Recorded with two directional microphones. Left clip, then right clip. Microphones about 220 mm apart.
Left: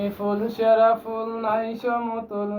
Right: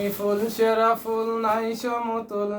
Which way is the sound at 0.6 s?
25° right (ahead or behind).